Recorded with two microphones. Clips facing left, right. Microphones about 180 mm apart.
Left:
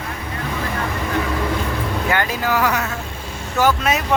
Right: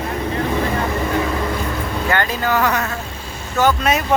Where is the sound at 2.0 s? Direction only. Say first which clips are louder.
Right 2 dB; 10° left (ahead or behind).